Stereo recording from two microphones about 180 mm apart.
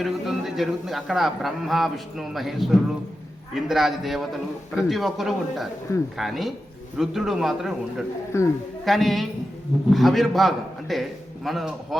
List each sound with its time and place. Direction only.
0.0 s a man's voice: centre (ahead or behind)
8.3 s a man's voice: 15° left (ahead or behind)
8.8 s a man's voice: centre (ahead or behind)